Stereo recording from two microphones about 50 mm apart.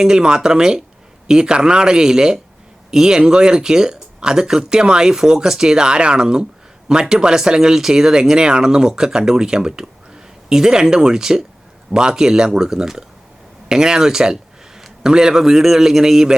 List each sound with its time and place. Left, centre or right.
0.0 s speech: centre